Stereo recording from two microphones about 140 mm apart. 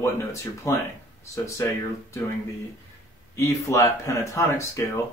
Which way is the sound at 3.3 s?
20° left (ahead or behind).